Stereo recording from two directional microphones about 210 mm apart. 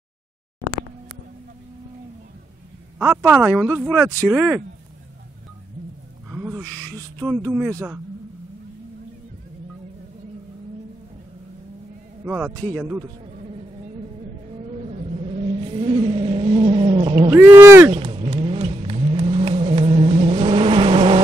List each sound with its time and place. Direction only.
3.0 s speech: 10° right (ahead or behind)
6.2 s a sound: 5° right (ahead or behind)
6.9 s a sound: 20° right (ahead or behind)
7.2 s speech: 10° right (ahead or behind)
12.3 s speech: 10° right (ahead or behind)
14.9 s vehicle: 30° right (ahead or behind)
17.3 s speech: 10° right (ahead or behind)
17.9 s vehicle: 25° right (ahead or behind)